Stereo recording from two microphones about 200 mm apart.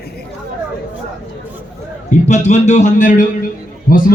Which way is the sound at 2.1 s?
35° left (ahead or behind).